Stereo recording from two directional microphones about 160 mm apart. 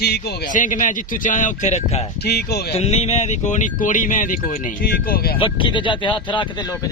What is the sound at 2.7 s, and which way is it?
Speech, 40° left (ahead or behind).